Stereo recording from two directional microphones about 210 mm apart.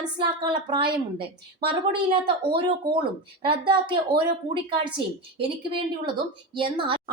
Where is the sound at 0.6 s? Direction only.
25° right (ahead or behind).